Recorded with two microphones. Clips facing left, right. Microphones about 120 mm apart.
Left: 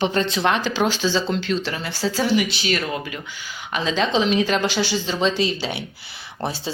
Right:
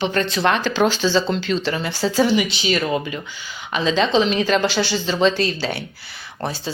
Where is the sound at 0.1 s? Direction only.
20° left (ahead or behind); by 2.8 s centre (ahead or behind).